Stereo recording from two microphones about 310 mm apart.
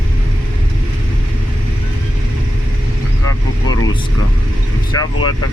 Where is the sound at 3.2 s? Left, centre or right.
Left.